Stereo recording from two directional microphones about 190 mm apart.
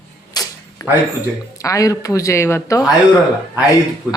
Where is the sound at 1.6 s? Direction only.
15° left (ahead or behind).